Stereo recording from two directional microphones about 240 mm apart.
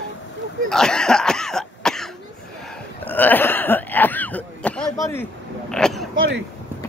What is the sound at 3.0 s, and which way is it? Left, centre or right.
Cough, centre.